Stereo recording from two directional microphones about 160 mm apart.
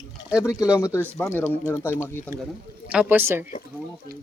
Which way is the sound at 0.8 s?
20° left (ahead or behind).